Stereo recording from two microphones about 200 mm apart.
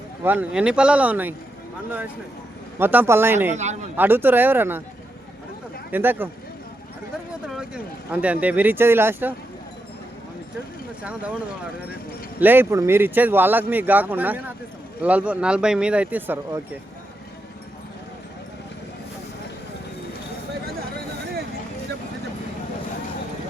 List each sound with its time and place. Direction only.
0.3 s speech: 5° right (ahead or behind)
2.7 s speech: 10° right (ahead or behind)
3.5 s a man's voice: 35° right (ahead or behind)
3.9 s speech: 10° right (ahead or behind)
5.9 s speech: 10° right (ahead or behind)
7.4 s speech: 5° right (ahead or behind)
11.0 s speech: 5° right (ahead or behind)